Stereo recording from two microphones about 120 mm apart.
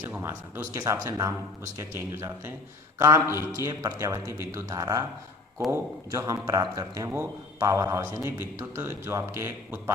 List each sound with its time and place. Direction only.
0.2 s a man's voice: 20° right (ahead or behind)